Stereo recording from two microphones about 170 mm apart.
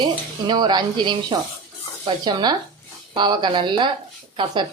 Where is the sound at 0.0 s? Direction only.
25° right (ahead or behind).